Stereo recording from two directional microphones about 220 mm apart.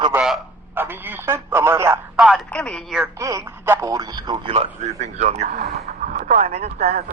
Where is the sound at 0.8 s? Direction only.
10° right (ahead or behind).